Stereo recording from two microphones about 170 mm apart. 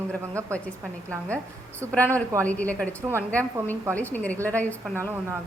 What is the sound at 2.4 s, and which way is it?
A woman's voice, 10° left (ahead or behind).